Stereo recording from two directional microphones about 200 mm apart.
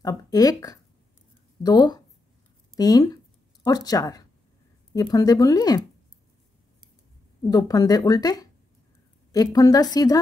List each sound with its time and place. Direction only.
0.0 s speech: 20° left (ahead or behind)
7.4 s speech: 20° left (ahead or behind)